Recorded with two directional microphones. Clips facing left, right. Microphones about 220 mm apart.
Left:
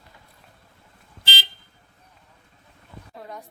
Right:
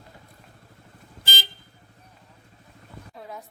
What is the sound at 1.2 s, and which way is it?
Vehicle, 45° right (ahead or behind).